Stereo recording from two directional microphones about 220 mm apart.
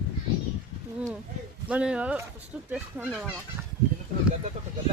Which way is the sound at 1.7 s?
5° right (ahead or behind).